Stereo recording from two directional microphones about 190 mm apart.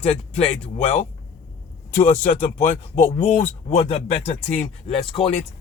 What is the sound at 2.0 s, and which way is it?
Speech, 40° left (ahead or behind).